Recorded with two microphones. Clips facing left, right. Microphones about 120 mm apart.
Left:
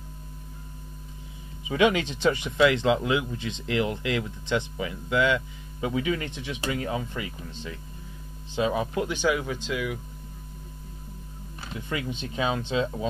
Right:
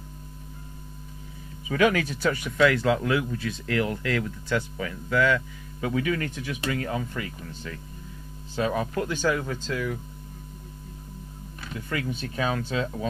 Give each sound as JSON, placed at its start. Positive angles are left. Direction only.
{"t": 1.7, "sound": "speech", "side_deg": 20}
{"t": 8.5, "sound": "speech", "side_deg": 15}
{"t": 12.2, "sound": "speech", "side_deg": 20}